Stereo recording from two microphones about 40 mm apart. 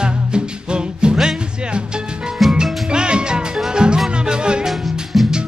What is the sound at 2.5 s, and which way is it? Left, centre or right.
Music, centre.